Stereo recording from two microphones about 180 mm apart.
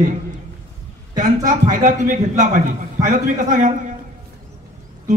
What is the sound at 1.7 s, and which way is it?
Speech, 45° right (ahead or behind).